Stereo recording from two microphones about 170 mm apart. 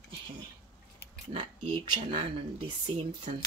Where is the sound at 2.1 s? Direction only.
30° right (ahead or behind).